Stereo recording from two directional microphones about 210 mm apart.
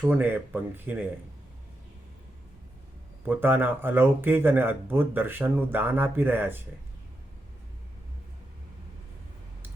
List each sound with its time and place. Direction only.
0.0 s speech: 10° right (ahead or behind)
3.2 s speech: 10° right (ahead or behind)